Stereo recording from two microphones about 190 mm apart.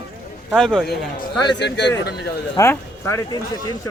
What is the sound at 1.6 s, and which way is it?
Speech, 65° left (ahead or behind).